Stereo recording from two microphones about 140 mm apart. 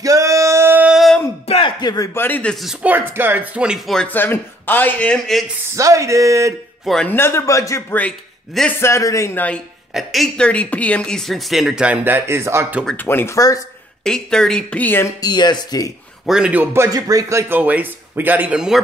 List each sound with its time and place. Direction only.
0.0 s male singing: 25° right (ahead or behind); by 1.2 s centre (ahead or behind)
1.5 s a sound: 35° left (ahead or behind)
2.1 s speech: 15° left (ahead or behind)
2.5 s speech: 5° right (ahead or behind)
5.8 s speech: 25° right (ahead or behind)
6.8 s speech: centre (ahead or behind)
7.1 s speech: 15° left (ahead or behind)
9.9 s speech: centre (ahead or behind); by 12.8 s 20° right (ahead or behind)
12.8 s speech: 15° left (ahead or behind)
14.0 s speech: 5° left (ahead or behind)
15.1 s speech: 30° left (ahead or behind)
16.3 s speech: 5° right (ahead or behind)